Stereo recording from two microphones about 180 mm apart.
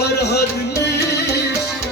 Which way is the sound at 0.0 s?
65° left (ahead or behind).